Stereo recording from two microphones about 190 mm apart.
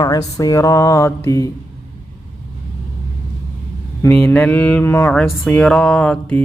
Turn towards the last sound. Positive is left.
turn(degrees=5)  # may be behind; listen again after turning